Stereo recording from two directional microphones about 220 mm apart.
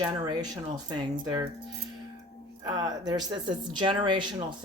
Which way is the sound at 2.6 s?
15° right (ahead or behind).